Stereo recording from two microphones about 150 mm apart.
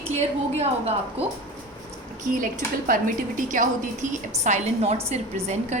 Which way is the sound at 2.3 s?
65° right (ahead or behind).